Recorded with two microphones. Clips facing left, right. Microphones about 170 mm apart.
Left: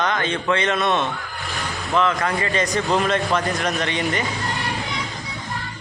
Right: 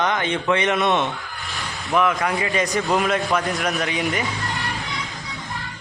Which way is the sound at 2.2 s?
5° right (ahead or behind).